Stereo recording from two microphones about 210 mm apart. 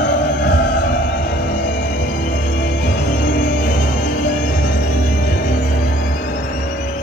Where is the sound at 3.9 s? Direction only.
40° left (ahead or behind).